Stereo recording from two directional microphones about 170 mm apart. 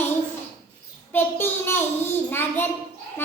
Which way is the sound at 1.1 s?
15° left (ahead or behind).